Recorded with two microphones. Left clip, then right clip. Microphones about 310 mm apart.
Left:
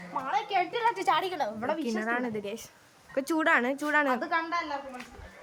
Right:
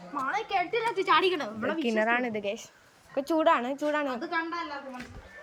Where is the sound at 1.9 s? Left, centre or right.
Centre.